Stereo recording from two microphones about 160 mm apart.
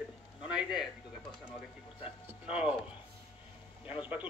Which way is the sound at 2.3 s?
5° right (ahead or behind).